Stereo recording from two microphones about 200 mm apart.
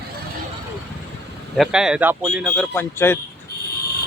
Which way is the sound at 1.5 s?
Centre (ahead or behind).